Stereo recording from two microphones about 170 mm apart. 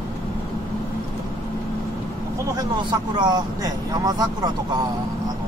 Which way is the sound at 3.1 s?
25° right (ahead or behind).